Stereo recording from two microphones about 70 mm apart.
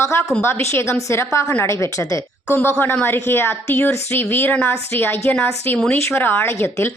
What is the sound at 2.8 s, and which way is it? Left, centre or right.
A woman's voice, left.